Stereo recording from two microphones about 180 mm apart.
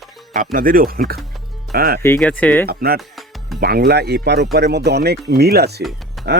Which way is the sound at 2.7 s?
60° right (ahead or behind).